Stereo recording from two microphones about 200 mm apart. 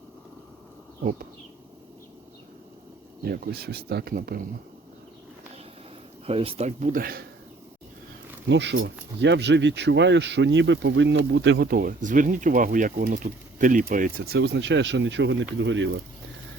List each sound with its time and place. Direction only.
3.2 s speech: 50° right (ahead or behind)
6.2 s speech: 30° right (ahead or behind); by 7.3 s 45° right (ahead or behind)
8.4 s speech: 60° right (ahead or behind)